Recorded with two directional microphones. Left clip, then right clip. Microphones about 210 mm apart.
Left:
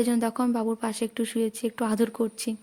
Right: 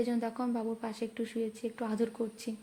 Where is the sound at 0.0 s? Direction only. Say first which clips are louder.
Left 8 dB; 40° left (ahead or behind).